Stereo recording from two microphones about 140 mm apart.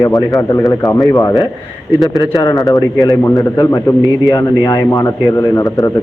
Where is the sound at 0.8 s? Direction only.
30° left (ahead or behind).